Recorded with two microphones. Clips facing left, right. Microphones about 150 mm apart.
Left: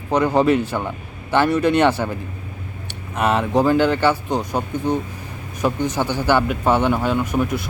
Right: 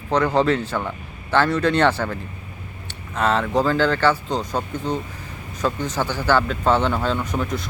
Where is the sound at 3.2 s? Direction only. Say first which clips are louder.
Left 2 dB; 15° left (ahead or behind).